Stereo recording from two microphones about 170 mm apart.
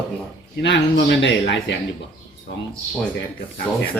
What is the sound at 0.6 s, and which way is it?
Speech, 90° left.